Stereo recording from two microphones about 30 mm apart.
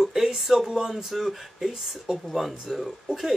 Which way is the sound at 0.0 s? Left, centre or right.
Centre.